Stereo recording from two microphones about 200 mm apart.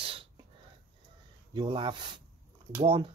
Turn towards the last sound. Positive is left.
turn(degrees=-25)  # may be behind; listen again after turning